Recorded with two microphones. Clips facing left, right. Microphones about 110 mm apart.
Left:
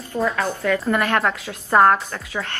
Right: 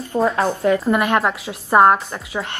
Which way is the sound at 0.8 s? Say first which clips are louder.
Right 2 dB; 15° right (ahead or behind).